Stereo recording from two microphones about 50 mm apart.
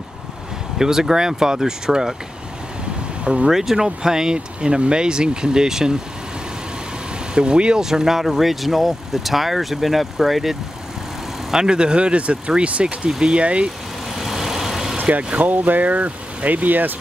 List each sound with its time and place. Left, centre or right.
0.7 s speech: centre
3.4 s speech: centre
7.3 s speech: centre
11.5 s speech: centre
14.1 s vehicle: centre
15.0 s vehicle: right
15.3 s speech: right